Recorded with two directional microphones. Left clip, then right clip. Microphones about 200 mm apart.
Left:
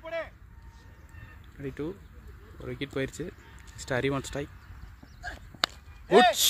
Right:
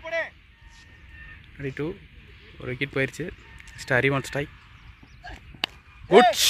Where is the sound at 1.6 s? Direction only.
5° left (ahead or behind).